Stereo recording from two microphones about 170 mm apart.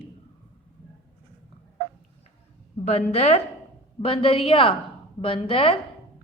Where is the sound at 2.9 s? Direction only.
40° left (ahead or behind).